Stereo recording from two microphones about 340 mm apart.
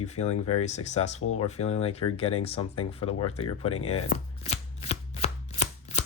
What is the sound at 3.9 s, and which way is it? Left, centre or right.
Chopping, centre.